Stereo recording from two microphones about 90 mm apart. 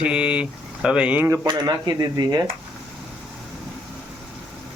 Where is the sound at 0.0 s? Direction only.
15° right (ahead or behind).